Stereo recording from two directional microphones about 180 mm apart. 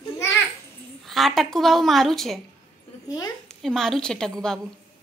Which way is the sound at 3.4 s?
Centre (ahead or behind).